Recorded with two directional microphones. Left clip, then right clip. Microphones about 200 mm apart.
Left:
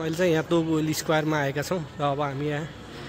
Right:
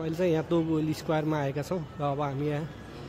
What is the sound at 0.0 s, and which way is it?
Speech, centre (ahead or behind).